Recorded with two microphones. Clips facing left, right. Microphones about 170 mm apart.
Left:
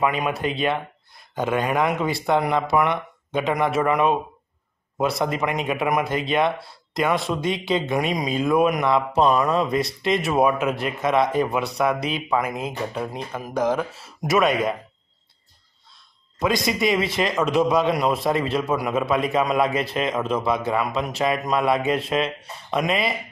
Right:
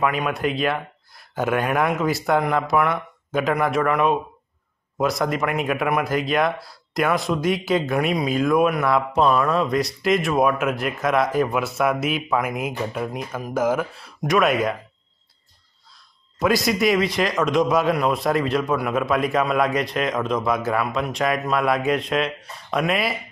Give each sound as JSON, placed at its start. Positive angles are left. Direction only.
{"t": 0.3, "sound": "speech", "side_deg": 0}
{"t": 8.6, "sound": "speech", "side_deg": 15}
{"t": 9.7, "sound": "speech", "side_deg": 0}
{"t": 16.3, "sound": "speech", "side_deg": 0}